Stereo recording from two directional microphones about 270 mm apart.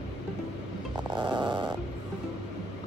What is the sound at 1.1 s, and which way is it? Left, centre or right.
Snoring, centre.